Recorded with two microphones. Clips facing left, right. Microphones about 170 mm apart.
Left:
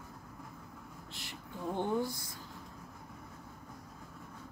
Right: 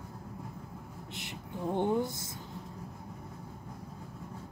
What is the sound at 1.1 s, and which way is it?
Speech, 20° right (ahead or behind).